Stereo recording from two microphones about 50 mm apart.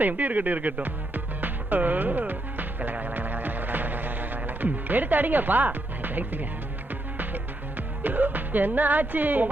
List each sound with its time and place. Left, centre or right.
0.0 s music: right